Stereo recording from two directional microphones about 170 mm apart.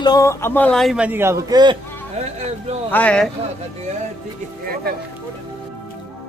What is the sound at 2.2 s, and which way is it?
Speech, 40° right (ahead or behind).